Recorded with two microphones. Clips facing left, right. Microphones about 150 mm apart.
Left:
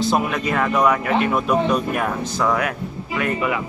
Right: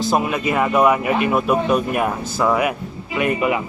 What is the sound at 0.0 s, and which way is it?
Speech, 5° right (ahead or behind).